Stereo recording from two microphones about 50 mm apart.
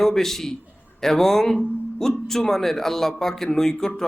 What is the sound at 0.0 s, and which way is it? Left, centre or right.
Speech, centre.